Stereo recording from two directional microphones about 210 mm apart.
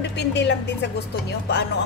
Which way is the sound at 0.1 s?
55° left (ahead or behind).